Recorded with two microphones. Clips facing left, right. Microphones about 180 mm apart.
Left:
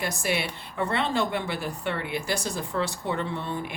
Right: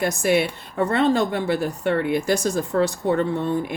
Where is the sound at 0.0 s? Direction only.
50° right (ahead or behind).